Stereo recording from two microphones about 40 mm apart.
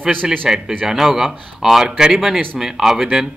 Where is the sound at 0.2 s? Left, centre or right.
Centre.